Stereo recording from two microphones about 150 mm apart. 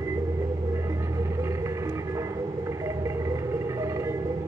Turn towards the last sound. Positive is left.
turn(degrees=-20)  # may be behind; listen again after turning